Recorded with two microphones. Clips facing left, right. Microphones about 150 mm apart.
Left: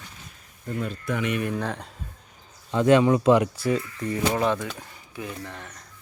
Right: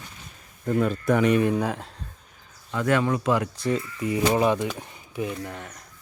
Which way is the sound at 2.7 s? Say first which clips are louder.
Left 5 dB; 20° left (ahead or behind).